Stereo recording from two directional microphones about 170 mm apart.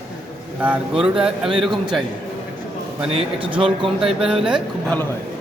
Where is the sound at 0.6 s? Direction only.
5° right (ahead or behind).